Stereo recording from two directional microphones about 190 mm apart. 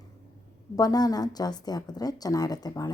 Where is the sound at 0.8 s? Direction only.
20° left (ahead or behind).